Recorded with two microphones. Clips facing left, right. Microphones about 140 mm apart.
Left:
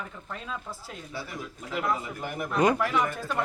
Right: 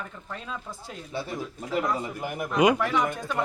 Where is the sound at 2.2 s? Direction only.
10° right (ahead or behind).